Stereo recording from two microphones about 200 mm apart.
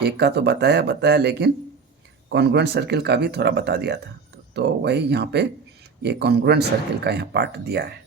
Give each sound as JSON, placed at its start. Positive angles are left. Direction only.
{"t": 0.0, "sound": "speech", "side_deg": -55}